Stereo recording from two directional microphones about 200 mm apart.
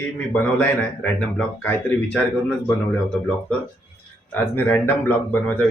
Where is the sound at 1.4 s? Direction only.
10° left (ahead or behind).